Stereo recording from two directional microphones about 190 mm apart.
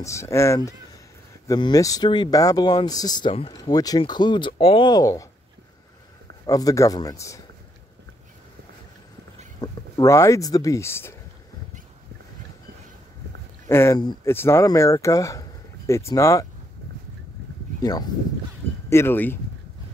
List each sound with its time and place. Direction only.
0.0 s speech: 15° left (ahead or behind)
6.4 s speech: 20° left (ahead or behind)
9.6 s speech: 20° left (ahead or behind)
13.7 s speech: 15° left (ahead or behind)
18.9 s speech: 15° left (ahead or behind)